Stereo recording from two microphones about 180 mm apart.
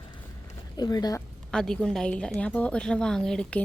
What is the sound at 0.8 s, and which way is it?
Speech, 20° left (ahead or behind).